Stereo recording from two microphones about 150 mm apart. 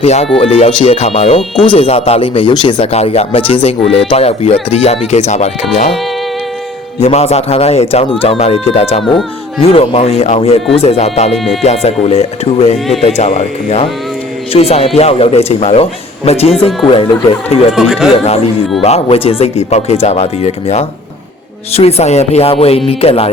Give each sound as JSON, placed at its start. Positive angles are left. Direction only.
{"t": 0.0, "sound": "speech", "side_deg": 45}
{"t": 1.4, "sound": "speech", "side_deg": 5}
{"t": 1.7, "sound": "speech", "side_deg": 35}
{"t": 7.0, "sound": "speech", "side_deg": 45}
{"t": 17.7, "sound": "speech", "side_deg": 0}
{"t": 18.8, "sound": "speech", "side_deg": 40}